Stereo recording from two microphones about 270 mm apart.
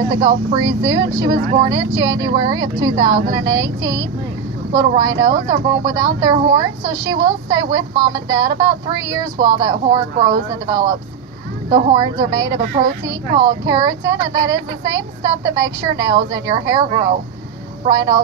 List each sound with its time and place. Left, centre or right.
0.5 s a woman's voice: centre
11.9 s a woman's voice: centre
12.6 s speech: right
13.0 s a woman's voice: centre